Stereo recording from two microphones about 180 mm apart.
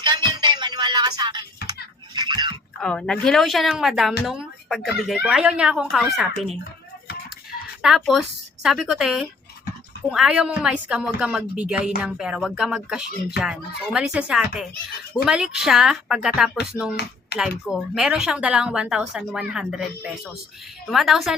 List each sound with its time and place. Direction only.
0.0 s music: 25° right (ahead or behind)
2.1 s a sound: 25° right (ahead or behind)
2.8 s speech: 5° left (ahead or behind)
7.8 s speech: centre (ahead or behind)
17.3 s speech: 65° left (ahead or behind)
17.7 s speech: 5° right (ahead or behind)